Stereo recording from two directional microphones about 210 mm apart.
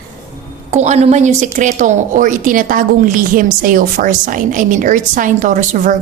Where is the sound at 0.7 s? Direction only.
35° right (ahead or behind).